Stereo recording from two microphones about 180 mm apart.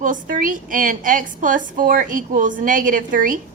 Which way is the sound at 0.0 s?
50° right (ahead or behind).